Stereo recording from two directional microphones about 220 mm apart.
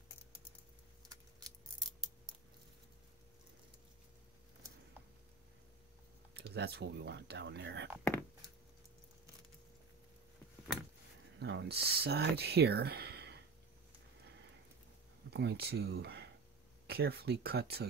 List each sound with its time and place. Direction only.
1.0 s scissors: 15° right (ahead or behind)
6.3 s speech: 50° right (ahead or behind)
8.0 s speech: 10° left (ahead or behind)
11.3 s speech: 50° right (ahead or behind)
15.3 s speech: 45° right (ahead or behind)